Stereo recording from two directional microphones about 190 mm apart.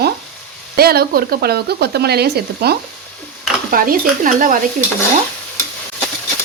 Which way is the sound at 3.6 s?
50° right (ahead or behind).